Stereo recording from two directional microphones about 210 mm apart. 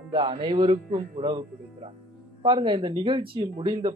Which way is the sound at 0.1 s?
25° right (ahead or behind).